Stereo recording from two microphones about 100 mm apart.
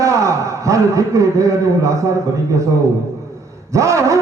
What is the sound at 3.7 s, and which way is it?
Speech, 30° right (ahead or behind).